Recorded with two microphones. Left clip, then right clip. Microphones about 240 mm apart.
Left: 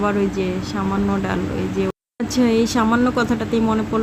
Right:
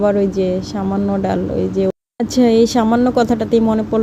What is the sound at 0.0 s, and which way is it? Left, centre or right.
Speech, centre.